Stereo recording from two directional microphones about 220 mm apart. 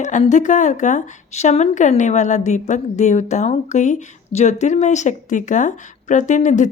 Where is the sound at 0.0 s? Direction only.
35° left (ahead or behind).